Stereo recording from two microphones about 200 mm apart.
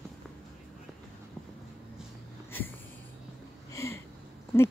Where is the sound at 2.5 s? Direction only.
10° left (ahead or behind).